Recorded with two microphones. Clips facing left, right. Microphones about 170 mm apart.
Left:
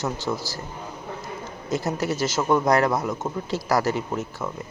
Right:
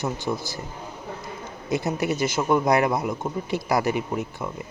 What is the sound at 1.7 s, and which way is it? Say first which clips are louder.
A man's voice: right 1 dB; 20° right (ahead or behind).